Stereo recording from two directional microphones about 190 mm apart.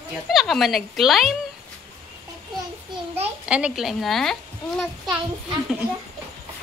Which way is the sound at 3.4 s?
5° right (ahead or behind).